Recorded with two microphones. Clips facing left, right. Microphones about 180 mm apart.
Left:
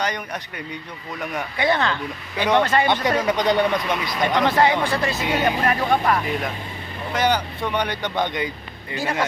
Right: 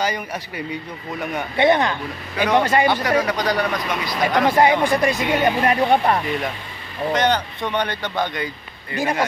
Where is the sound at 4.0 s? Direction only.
Centre (ahead or behind).